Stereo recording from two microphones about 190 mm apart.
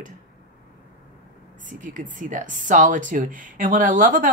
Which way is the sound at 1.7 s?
40° right (ahead or behind).